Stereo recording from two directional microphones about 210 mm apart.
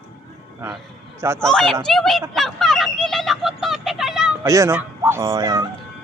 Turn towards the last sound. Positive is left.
turn(degrees=-15)  # may be behind; listen again after turning